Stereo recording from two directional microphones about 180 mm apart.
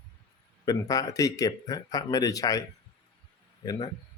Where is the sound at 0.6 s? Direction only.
20° left (ahead or behind).